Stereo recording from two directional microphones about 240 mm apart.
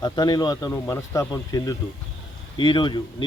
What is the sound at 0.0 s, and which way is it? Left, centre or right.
Speech, centre.